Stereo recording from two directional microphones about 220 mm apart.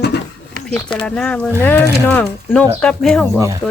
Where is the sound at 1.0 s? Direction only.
5° left (ahead or behind).